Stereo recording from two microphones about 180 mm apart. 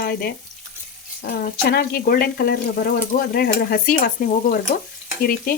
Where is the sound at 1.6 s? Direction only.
55° left (ahead or behind).